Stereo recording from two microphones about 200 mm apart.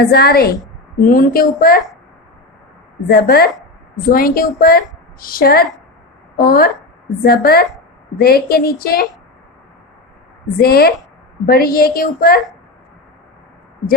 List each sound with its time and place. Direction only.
0.0 s a woman's voice: 50° left (ahead or behind)
3.1 s a woman's voice: 50° left (ahead or behind)
10.6 s a woman's voice: 50° left (ahead or behind)